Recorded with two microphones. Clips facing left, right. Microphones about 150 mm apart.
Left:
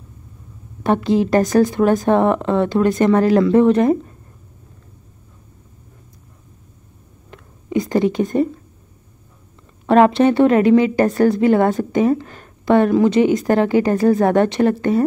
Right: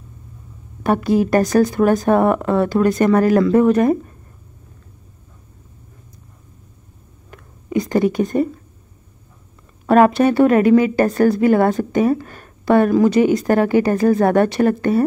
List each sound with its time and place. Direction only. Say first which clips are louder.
1.0 s speech: right 1 dB; 20° left (ahead or behind)
7.2 s a sound: even; 25° left (ahead or behind)
9.8 s speech: even; 25° left (ahead or behind)